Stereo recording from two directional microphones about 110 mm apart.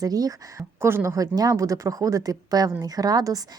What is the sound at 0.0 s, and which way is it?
A woman's voice, 35° right (ahead or behind).